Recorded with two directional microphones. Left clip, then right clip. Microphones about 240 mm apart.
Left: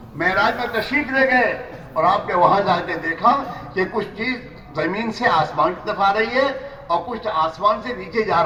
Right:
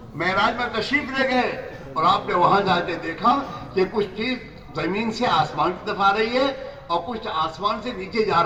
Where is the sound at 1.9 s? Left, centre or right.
Centre.